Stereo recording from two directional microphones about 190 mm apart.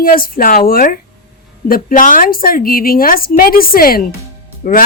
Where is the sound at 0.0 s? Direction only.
50° left (ahead or behind).